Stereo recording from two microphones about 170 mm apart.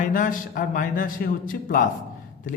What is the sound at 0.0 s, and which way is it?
A man's voice, 50° left (ahead or behind).